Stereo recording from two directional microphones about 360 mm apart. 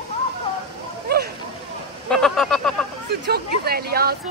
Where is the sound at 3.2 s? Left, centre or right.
Right.